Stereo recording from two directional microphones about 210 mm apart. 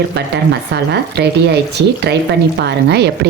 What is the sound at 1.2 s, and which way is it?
Speech, 50° right (ahead or behind).